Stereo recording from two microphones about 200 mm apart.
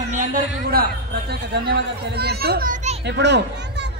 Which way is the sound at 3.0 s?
60° right (ahead or behind).